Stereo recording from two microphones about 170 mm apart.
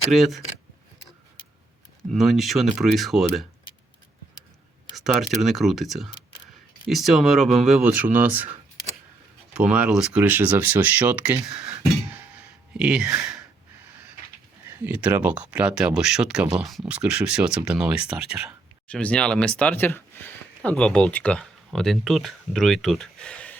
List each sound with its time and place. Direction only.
0.1 s speech: centre (ahead or behind)
2.1 s speech: centre (ahead or behind)
4.9 s speech: centre (ahead or behind)
9.5 s speech: 5° right (ahead or behind)
14.7 s speech: 10° right (ahead or behind); by 23.6 s 5° left (ahead or behind)